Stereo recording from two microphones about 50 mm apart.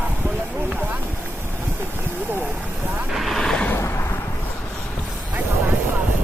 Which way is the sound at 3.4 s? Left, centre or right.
Centre.